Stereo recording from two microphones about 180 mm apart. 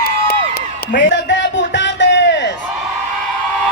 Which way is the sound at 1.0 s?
85° left.